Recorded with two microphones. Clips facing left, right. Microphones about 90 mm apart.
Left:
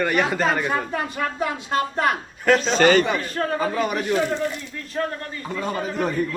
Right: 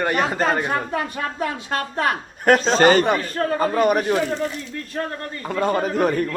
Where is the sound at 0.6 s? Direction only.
55° right (ahead or behind).